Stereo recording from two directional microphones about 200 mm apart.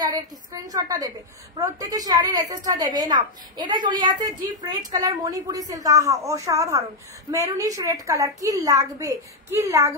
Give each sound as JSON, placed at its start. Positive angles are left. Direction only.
{"t": 0.0, "sound": "a woman's voice", "side_deg": -20}